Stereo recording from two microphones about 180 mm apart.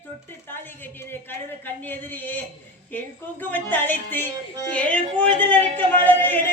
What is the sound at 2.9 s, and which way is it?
Music, 10° left (ahead or behind).